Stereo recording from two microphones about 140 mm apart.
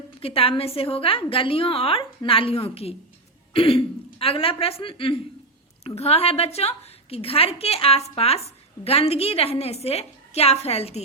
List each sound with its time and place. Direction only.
0.2 s a woman's voice: 40° left (ahead or behind)